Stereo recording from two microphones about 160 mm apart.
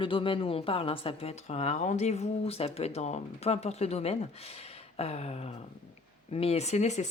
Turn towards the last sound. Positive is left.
turn(degrees=45)  # may be behind; listen again after turning